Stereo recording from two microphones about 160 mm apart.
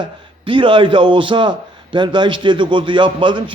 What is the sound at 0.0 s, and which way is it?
A man's voice, 30° right (ahead or behind).